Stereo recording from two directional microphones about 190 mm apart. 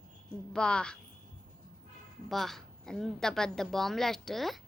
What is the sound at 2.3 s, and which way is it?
A woman's voice, centre (ahead or behind).